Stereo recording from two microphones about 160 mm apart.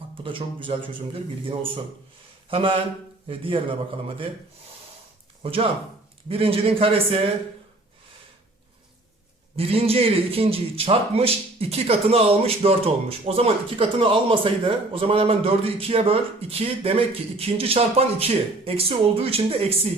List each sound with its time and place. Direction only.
0.2 s a man's voice: 30° right (ahead or behind)
5.4 s a man's voice: 35° right (ahead or behind)
9.6 s a man's voice: 35° right (ahead or behind)